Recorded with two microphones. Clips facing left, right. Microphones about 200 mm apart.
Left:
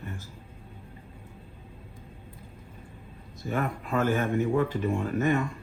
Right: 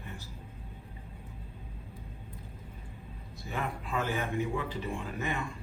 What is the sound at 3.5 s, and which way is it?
Speech, 50° left (ahead or behind).